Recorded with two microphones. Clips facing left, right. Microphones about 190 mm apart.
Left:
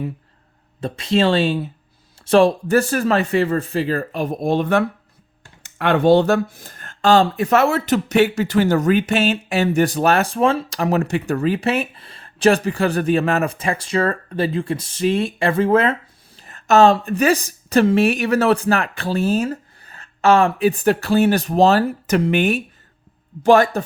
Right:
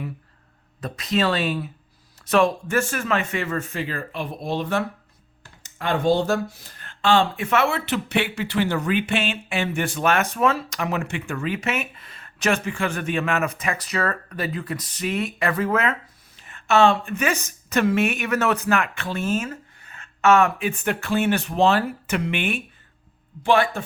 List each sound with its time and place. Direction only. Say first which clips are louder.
0.8 s speech: left 5 dB; 30° left (ahead or behind)